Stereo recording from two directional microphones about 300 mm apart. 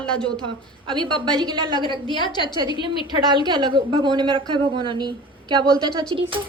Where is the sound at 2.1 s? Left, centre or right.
Centre.